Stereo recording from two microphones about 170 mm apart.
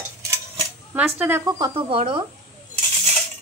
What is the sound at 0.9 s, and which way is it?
Speech, 10° right (ahead or behind).